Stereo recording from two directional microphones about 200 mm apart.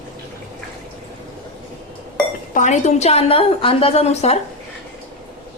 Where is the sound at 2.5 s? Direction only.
40° left (ahead or behind).